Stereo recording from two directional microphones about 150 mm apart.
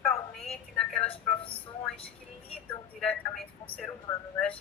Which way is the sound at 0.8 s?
5° left (ahead or behind).